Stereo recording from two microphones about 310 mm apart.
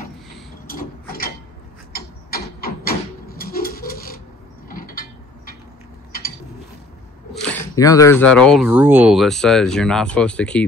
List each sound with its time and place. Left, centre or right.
0.7 s a sound: left
4.6 s mechanisms: left
7.4 s speech: centre